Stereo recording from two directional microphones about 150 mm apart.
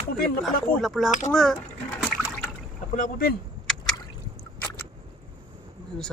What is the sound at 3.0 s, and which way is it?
Speech, 65° left (ahead or behind).